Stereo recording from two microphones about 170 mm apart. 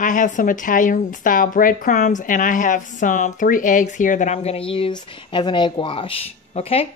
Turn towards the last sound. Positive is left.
turn(degrees=35)  # may be behind; listen again after turning